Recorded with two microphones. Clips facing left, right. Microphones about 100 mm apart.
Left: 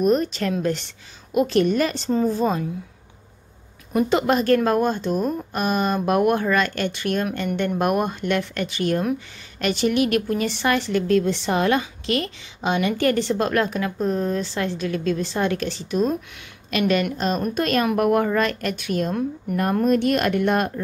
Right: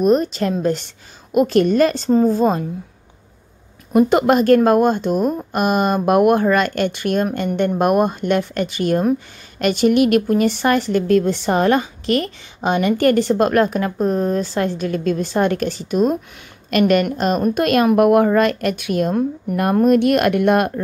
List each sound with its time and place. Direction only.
0.0 s a woman's voice: 40° right (ahead or behind)
1.3 s a woman's voice: 50° right (ahead or behind)
3.9 s a woman's voice: 55° right (ahead or behind)